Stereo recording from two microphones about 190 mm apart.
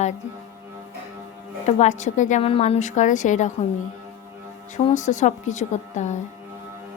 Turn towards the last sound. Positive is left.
turn(degrees=40)  # may be behind; listen again after turning